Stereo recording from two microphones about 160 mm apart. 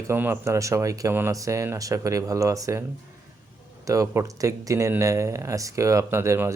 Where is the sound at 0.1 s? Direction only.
15° right (ahead or behind).